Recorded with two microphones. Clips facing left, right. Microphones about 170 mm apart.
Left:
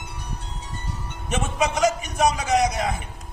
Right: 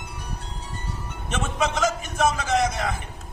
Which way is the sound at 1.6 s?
15° left (ahead or behind).